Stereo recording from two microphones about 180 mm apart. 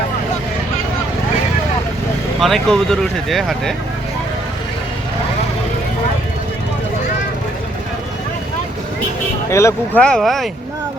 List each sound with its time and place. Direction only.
2.4 s speech: centre (ahead or behind)
9.5 s speech: 15° left (ahead or behind)
10.0 s speech: 5° left (ahead or behind)